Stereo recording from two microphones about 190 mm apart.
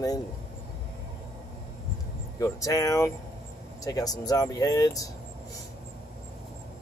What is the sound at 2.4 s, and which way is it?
Speech, 15° left (ahead or behind).